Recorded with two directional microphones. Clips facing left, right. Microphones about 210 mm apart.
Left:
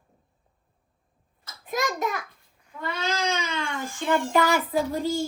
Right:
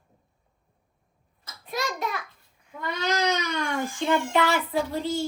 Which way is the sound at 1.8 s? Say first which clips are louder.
Left 3 dB; 15° left (ahead or behind).